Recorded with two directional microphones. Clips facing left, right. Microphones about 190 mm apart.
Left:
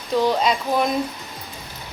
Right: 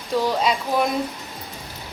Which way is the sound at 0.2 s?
5° right (ahead or behind).